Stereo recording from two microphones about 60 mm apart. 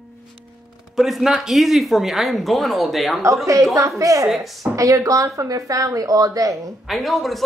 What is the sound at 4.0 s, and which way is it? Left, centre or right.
A woman's voice, right.